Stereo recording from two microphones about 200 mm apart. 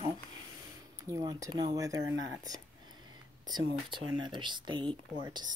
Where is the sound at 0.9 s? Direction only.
15° right (ahead or behind).